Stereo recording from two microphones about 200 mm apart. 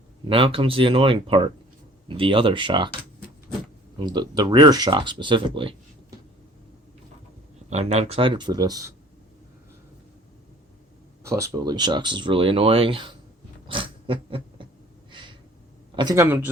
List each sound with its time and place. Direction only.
0.3 s speech: 25° right (ahead or behind)
7.7 s speech: 35° right (ahead or behind); by 8.9 s 20° right (ahead or behind)
11.2 s speech: 15° right (ahead or behind)
13.7 s a sound: 25° right (ahead or behind)
15.1 s gasp: 25° right (ahead or behind)
16.0 s speech: 15° right (ahead or behind)